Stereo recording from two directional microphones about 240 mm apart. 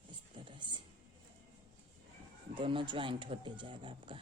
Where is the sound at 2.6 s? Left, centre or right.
Right.